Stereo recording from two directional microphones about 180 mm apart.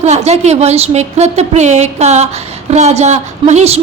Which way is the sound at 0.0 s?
35° right (ahead or behind).